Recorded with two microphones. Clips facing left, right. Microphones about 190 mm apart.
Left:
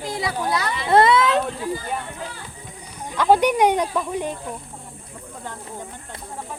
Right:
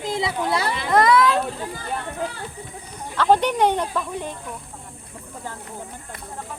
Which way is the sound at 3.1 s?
10° left (ahead or behind).